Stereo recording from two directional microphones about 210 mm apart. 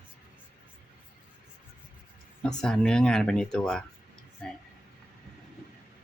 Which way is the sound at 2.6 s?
5° left (ahead or behind).